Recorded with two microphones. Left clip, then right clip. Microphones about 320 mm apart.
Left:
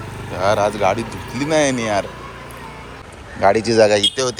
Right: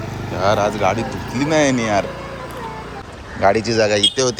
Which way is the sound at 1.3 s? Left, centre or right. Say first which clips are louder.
Right 1 dB; centre.